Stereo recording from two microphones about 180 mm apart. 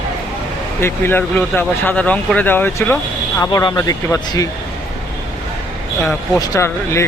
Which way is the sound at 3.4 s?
20° left (ahead or behind).